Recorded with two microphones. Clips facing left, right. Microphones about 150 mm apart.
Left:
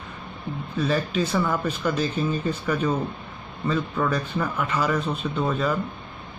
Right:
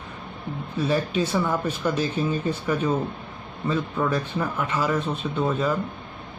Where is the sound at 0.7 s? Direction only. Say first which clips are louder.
Right 1 dB; 10° right (ahead or behind).